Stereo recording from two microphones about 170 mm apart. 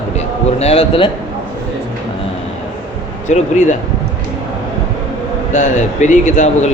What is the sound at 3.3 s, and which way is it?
Speech, 45° left (ahead or behind).